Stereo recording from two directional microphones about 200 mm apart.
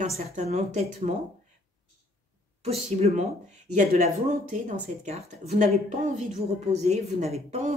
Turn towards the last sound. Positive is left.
turn(degrees=-35)  # may be behind; listen again after turning